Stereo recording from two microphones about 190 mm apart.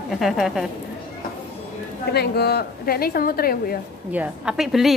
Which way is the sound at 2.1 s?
60° left (ahead or behind).